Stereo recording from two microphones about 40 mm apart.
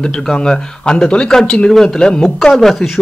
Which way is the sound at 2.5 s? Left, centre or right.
Centre.